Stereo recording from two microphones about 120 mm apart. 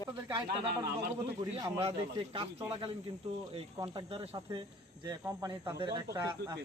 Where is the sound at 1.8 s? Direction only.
50° right (ahead or behind).